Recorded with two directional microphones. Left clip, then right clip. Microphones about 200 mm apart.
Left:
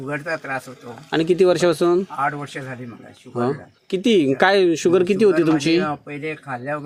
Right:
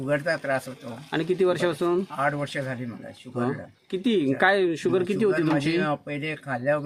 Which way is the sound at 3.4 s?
20° left (ahead or behind).